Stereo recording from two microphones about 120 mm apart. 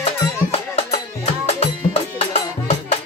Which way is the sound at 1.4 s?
65° left (ahead or behind).